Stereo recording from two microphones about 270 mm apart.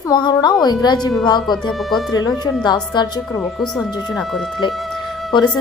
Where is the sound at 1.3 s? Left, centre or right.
Centre.